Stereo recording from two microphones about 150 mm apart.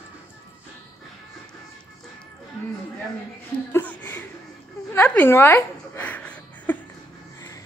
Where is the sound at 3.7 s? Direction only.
10° left (ahead or behind).